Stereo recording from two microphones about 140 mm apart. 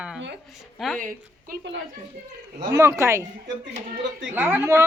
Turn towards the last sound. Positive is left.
turn(degrees=-20)  # may be behind; listen again after turning